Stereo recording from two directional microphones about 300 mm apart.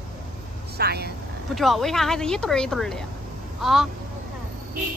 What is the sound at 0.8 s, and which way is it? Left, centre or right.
Speech, right.